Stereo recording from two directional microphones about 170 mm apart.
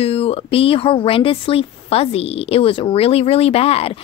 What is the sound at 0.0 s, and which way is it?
A woman's voice, 35° left (ahead or behind).